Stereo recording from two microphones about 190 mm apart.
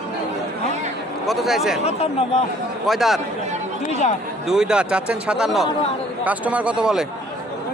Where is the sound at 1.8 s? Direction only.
35° left (ahead or behind).